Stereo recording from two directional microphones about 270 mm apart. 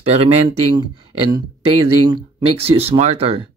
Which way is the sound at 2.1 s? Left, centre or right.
Right.